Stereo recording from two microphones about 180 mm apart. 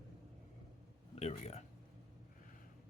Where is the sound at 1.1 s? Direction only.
35° left (ahead or behind).